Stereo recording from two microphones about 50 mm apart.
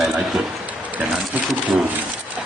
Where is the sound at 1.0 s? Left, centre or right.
Right.